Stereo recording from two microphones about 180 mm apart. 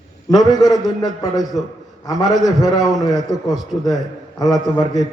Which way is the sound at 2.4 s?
20° left (ahead or behind).